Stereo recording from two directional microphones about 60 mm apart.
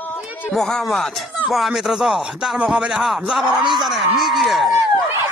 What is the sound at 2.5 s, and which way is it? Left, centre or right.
Speech, centre.